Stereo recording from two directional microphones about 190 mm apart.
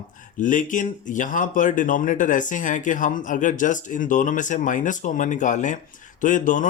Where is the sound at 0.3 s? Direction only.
40° left (ahead or behind).